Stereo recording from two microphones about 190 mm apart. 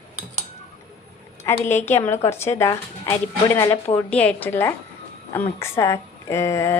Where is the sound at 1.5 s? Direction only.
15° left (ahead or behind).